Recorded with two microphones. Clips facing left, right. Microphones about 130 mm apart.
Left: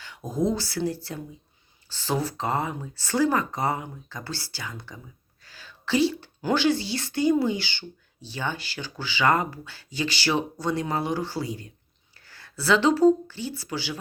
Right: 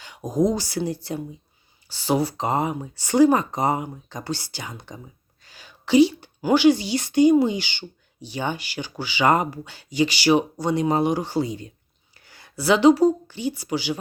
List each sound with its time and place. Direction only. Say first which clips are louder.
0.0 s a woman's voice: right 5 dB; 15° right (ahead or behind)